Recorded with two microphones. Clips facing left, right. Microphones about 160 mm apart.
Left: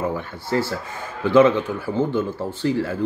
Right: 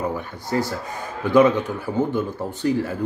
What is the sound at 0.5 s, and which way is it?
Speech, 15° right (ahead or behind).